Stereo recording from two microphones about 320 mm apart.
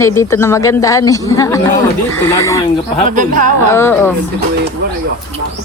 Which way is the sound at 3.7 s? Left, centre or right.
Centre.